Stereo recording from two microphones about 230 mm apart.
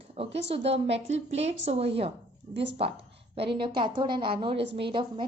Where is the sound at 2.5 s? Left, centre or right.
Right.